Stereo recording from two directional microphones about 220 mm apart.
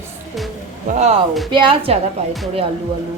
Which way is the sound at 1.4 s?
20° right (ahead or behind).